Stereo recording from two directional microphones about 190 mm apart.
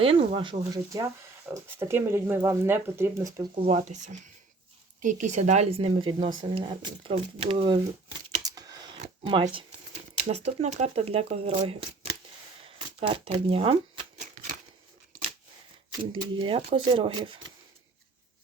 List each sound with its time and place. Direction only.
0.0 s speech: 30° right (ahead or behind)
8.4 s computer keyboard: 20° right (ahead or behind)
10.2 s speech: 35° right (ahead or behind)
16.3 s speech: 30° right (ahead or behind)